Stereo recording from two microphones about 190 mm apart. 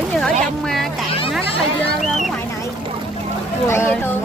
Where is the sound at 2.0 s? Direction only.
Centre (ahead or behind).